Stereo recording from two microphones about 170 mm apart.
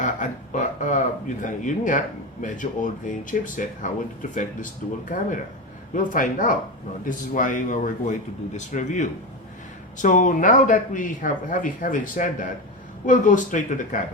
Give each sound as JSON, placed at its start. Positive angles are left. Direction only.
{"t": 0.0, "sound": "speech", "side_deg": 50}